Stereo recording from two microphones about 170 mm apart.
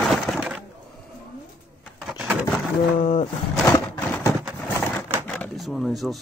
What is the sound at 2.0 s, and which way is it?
Vehicle, centre (ahead or behind).